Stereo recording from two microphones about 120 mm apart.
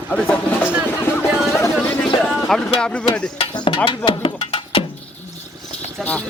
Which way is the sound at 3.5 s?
40° left (ahead or behind).